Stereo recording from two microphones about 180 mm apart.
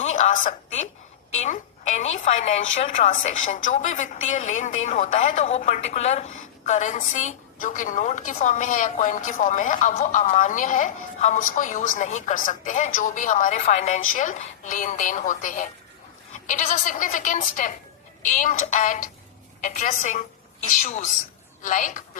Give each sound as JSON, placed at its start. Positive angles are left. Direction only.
{"t": 0.0, "sound": "a sound", "side_deg": 40}
{"t": 1.4, "sound": "a woman's voice", "side_deg": 40}
{"t": 21.6, "sound": "a woman's voice", "side_deg": 45}